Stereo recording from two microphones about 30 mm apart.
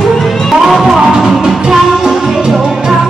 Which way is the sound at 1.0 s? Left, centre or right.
Right.